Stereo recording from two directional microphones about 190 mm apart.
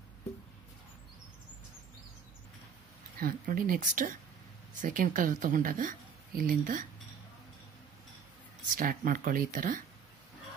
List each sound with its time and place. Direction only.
3.2 s speech: 50° right (ahead or behind)
8.7 s speech: 45° right (ahead or behind)